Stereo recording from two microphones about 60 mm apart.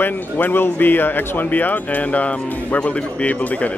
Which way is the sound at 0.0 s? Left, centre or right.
Left.